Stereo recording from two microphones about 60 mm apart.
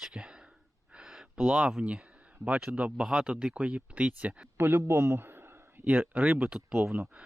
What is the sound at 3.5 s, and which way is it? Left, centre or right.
Speech, right.